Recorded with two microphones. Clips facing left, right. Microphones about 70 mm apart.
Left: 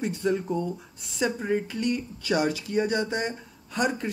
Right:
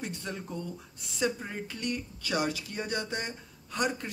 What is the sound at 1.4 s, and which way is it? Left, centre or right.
Speech, centre.